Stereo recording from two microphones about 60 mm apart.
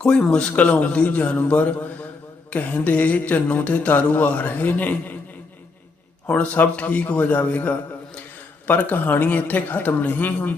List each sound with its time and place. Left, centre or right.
0.0 s speech: centre
6.2 s speech: left